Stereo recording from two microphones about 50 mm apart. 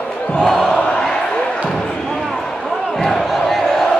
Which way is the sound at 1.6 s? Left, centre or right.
Centre.